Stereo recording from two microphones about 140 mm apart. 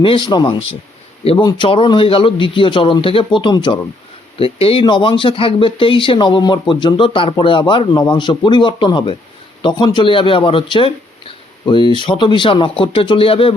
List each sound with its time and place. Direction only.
0.0 s speech: 35° left (ahead or behind)
1.2 s speech: 45° left (ahead or behind)